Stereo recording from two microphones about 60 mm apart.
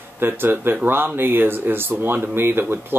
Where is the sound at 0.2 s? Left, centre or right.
Right.